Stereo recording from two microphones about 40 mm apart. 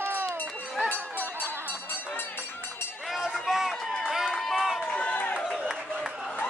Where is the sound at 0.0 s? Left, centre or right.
Right.